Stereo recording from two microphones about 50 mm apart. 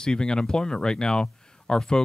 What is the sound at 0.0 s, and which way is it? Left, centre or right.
Speech, centre.